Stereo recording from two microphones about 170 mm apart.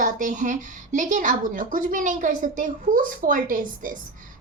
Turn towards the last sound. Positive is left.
turn(degrees=-50)  # may be behind; listen again after turning